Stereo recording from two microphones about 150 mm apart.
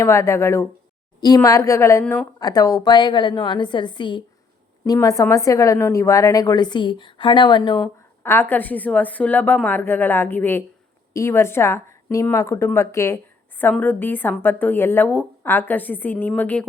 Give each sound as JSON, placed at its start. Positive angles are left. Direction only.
{"t": 0.0, "sound": "a woman's voice", "side_deg": 20}
{"t": 8.2, "sound": "a woman's voice", "side_deg": 15}